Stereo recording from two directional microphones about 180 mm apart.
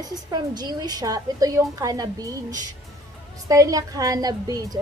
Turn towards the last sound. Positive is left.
turn(degrees=-20)  # may be behind; listen again after turning